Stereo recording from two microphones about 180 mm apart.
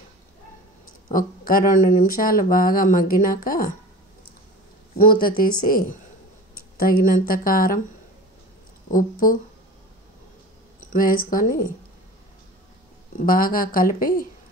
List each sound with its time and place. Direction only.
1.1 s speech: 50° left (ahead or behind)
4.9 s speech: 55° left (ahead or behind)
8.9 s speech: 50° left (ahead or behind)
10.9 s speech: 50° left (ahead or behind)
13.2 s speech: 50° left (ahead or behind)